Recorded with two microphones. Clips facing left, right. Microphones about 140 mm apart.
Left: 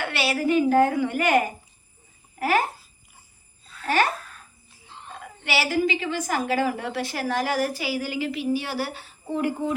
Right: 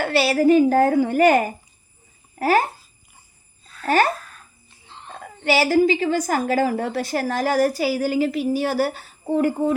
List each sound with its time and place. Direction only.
0.0 s a woman's voice: 35° right (ahead or behind)
3.8 s a woman's voice: 40° right (ahead or behind)
5.1 s a woman's voice: 35° right (ahead or behind)